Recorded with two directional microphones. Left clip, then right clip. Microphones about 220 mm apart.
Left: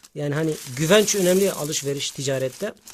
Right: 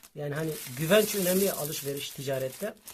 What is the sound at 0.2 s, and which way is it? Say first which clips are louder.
Speech: left 8 dB; 55° left (ahead or behind).